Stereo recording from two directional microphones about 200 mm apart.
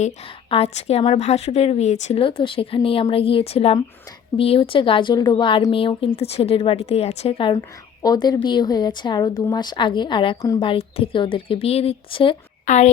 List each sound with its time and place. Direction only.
0.5 s a woman's voice: 30° left (ahead or behind)
12.6 s speech: 35° left (ahead or behind)